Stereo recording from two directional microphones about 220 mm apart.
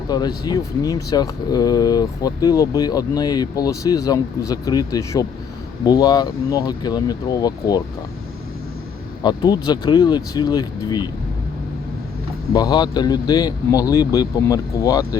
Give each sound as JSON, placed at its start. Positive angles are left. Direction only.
{"t": 0.1, "sound": "speech", "side_deg": 20}
{"t": 9.2, "sound": "speech", "side_deg": 20}
{"t": 12.5, "sound": "speech", "side_deg": 20}